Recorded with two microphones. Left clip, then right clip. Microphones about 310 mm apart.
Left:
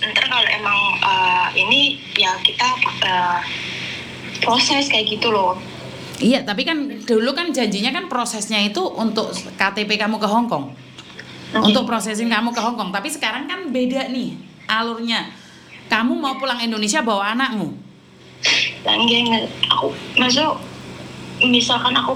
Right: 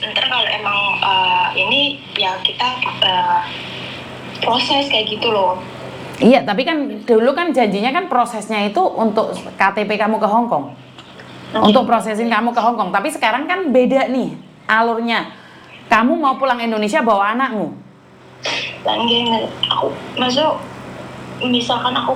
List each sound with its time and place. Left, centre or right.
0.2 s a sound: left
6.1 s a woman's voice: centre
11.6 s a woman's voice: centre
18.4 s a woman's voice: left